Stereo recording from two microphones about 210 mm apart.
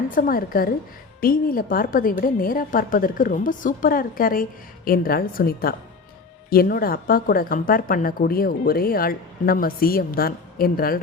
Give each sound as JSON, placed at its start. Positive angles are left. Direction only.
{"t": 0.1, "sound": "speech", "side_deg": 45}